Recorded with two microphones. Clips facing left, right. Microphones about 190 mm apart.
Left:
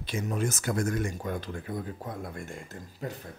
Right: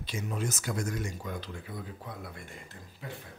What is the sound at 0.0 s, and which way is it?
Speech, 55° left (ahead or behind).